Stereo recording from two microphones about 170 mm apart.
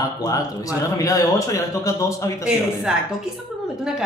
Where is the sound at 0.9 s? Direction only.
20° left (ahead or behind).